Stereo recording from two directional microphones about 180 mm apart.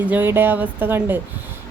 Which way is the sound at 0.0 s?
10° right (ahead or behind).